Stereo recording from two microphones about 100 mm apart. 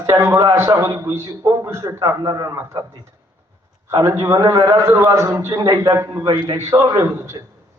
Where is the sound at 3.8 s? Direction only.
30° right (ahead or behind).